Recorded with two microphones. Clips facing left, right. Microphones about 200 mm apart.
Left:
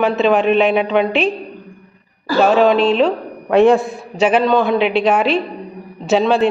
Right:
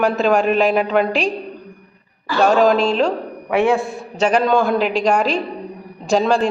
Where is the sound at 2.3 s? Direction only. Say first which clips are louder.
Left 3 dB; 40° left (ahead or behind).